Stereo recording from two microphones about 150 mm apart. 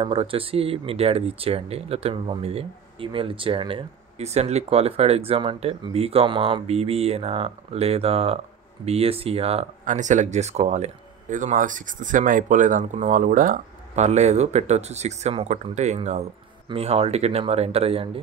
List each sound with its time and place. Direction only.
0.0 s speech: 35° right (ahead or behind)
9.8 s speech: 55° right (ahead or behind); by 18.2 s 40° right (ahead or behind)